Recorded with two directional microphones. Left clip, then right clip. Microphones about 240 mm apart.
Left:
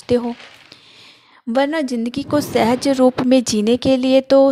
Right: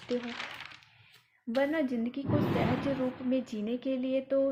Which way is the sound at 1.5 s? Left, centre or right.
Left.